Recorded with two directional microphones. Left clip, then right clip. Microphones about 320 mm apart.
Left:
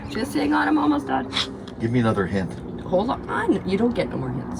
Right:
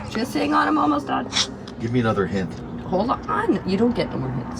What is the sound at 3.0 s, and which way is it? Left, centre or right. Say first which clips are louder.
Speech: right 1 dB; right.